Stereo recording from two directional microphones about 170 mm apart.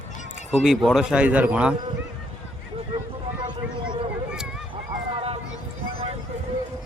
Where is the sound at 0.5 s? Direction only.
5° right (ahead or behind).